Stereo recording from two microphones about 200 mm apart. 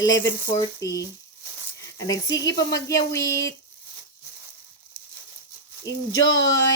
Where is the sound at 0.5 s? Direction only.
15° left (ahead or behind).